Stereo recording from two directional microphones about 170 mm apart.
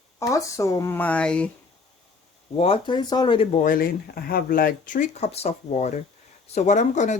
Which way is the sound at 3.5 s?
55° left (ahead or behind).